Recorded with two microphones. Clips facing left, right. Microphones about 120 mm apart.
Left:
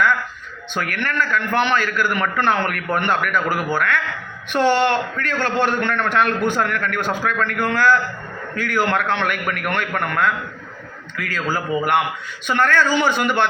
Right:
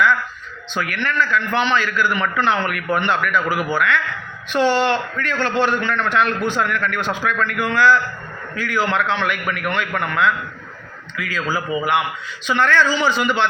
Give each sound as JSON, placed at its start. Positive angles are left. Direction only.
{"t": 0.7, "sound": "a man's voice", "side_deg": 50}